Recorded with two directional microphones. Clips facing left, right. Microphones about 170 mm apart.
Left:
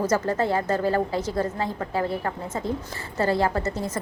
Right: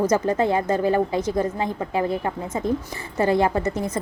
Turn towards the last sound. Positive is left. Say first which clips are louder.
# right 3 dB
turn(degrees=-15)  # may be behind; listen again after turning